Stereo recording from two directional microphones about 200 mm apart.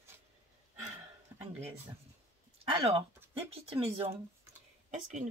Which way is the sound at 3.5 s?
30° right (ahead or behind).